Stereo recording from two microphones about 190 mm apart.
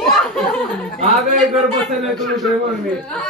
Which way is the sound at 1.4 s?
Centre (ahead or behind).